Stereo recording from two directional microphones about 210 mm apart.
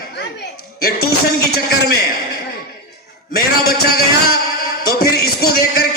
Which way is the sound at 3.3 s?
45° left (ahead or behind).